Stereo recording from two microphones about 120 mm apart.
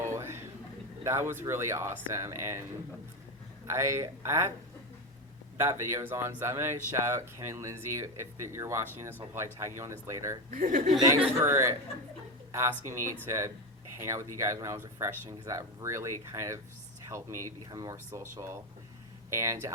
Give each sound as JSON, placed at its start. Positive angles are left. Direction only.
{"t": 0.1, "sound": "a sound", "side_deg": -20}
{"t": 1.0, "sound": "speech", "side_deg": -20}
{"t": 3.7, "sound": "speech", "side_deg": -25}
{"t": 5.5, "sound": "speech", "side_deg": -25}
{"t": 10.5, "sound": "speech", "side_deg": -90}
{"t": 11.3, "sound": "speech", "side_deg": -25}